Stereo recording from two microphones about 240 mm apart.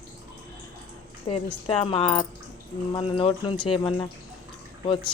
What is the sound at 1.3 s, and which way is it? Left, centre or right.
Speech, left.